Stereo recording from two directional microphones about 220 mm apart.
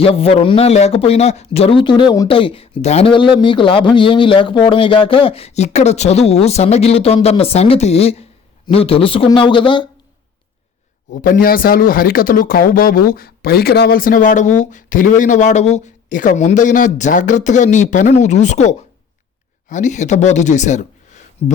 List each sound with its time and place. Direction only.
0.0 s a man's voice: 25° left (ahead or behind)
11.1 s speech: 40° left (ahead or behind)